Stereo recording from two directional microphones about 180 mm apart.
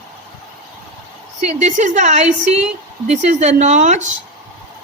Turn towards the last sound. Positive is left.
turn(degrees=-40)  # may be behind; listen again after turning